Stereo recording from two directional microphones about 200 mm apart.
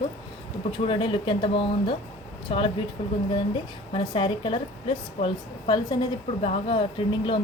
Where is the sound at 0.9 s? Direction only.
25° left (ahead or behind).